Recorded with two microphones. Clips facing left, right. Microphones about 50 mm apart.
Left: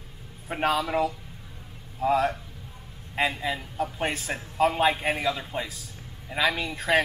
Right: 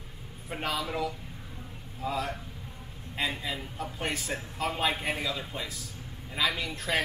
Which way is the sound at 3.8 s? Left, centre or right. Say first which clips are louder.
Left 5 dB; left.